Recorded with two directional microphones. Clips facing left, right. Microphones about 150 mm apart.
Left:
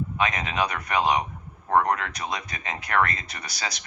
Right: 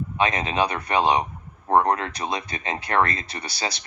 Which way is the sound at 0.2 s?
30° right (ahead or behind).